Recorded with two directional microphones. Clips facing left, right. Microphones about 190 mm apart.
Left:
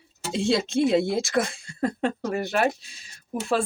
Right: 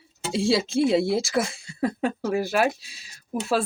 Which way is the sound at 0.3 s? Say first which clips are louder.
Right 1 dB; centre (ahead or behind).